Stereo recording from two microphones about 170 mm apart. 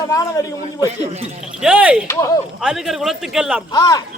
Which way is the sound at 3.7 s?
20° left (ahead or behind).